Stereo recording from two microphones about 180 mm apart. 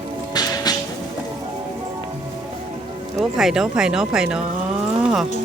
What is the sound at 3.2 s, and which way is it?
Speech, centre (ahead or behind).